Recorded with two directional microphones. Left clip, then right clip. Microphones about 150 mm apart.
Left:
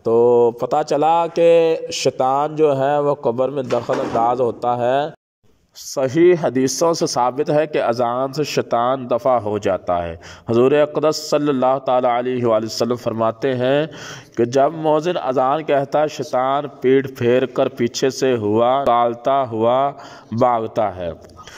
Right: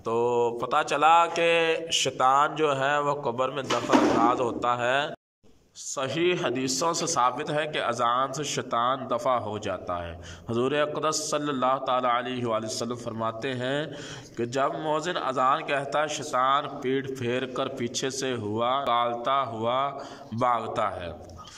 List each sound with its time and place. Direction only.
0.0 s a man's voice: 40° left (ahead or behind)